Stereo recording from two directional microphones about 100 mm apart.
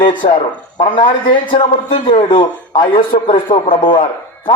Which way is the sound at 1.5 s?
55° left (ahead or behind).